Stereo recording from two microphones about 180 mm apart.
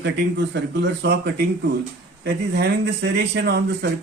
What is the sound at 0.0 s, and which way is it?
Speech, 75° right (ahead or behind).